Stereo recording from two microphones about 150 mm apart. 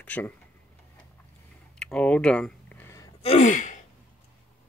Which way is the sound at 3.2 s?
50° left (ahead or behind).